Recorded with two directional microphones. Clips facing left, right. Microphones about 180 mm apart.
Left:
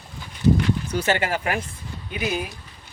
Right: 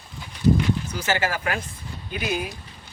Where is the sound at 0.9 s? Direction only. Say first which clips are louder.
Left 3 dB; 25° left (ahead or behind).